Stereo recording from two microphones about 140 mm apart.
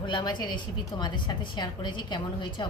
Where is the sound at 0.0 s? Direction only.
35° left (ahead or behind).